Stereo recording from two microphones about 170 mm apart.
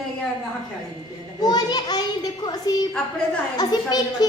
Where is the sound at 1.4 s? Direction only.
25° left (ahead or behind).